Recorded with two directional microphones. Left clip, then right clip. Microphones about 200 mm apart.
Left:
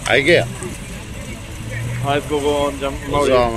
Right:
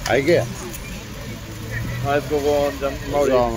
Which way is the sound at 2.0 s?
45° left (ahead or behind).